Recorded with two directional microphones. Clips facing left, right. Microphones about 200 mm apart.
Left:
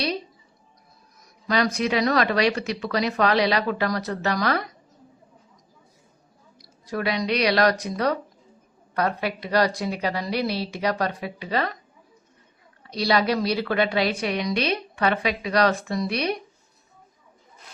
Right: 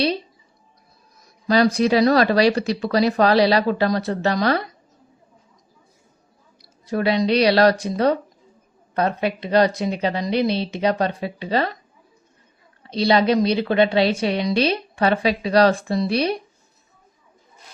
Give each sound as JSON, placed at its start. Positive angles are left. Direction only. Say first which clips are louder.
{"t": 1.5, "sound": "speech", "louder": "right 6 dB", "side_deg": -35}
{"t": 6.6, "sound": "a woman's voice", "louder": "right 5 dB", "side_deg": -25}
{"t": 12.8, "sound": "a woman's voice", "louder": "right 5 dB", "side_deg": -25}